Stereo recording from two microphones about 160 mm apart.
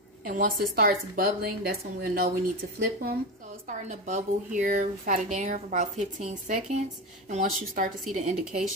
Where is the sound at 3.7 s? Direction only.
50° right (ahead or behind).